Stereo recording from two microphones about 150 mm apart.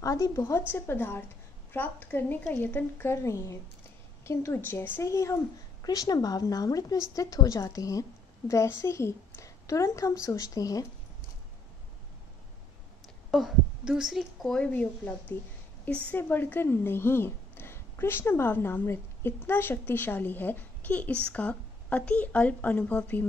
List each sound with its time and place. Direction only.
0.0 s a woman's voice: 20° left (ahead or behind)
13.3 s a woman's voice: centre (ahead or behind)